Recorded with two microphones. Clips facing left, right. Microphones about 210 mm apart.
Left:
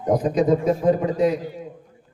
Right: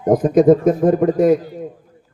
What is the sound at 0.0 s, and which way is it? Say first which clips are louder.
A man's voice: right 7 dB; 50° right (ahead or behind).